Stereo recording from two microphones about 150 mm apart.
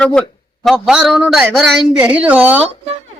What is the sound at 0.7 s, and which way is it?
A man's voice, centre (ahead or behind).